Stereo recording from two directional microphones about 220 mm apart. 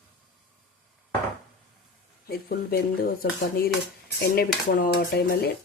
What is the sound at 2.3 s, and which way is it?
Speech, 45° left (ahead or behind).